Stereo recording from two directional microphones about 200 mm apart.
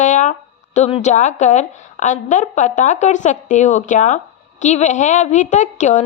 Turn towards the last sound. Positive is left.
turn(degrees=35)  # may be behind; listen again after turning